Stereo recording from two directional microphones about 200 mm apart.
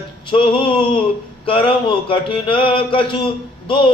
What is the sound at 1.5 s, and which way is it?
Speech, 25° left (ahead or behind).